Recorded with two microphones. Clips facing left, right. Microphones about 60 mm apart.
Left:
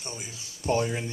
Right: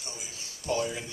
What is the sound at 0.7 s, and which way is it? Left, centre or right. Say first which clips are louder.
Speech: left 4 dB; left.